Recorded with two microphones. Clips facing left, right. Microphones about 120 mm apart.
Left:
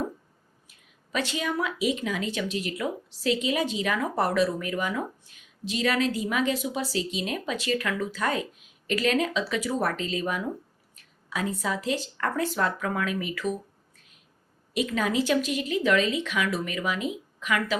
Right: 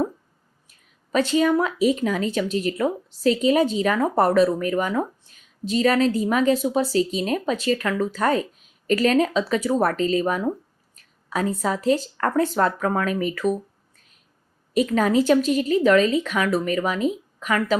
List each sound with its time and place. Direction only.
0.7 s speech: 40° right (ahead or behind)
14.7 s speech: 40° right (ahead or behind)